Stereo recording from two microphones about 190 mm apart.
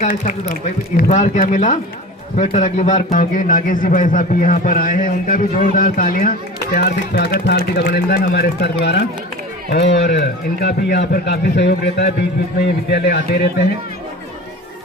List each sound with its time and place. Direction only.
0.1 s speech: 55° left (ahead or behind)
0.9 s a man's voice: 40° left (ahead or behind)
6.7 s speech: 60° left (ahead or behind)